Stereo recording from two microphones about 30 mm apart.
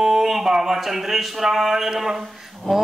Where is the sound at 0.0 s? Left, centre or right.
Centre.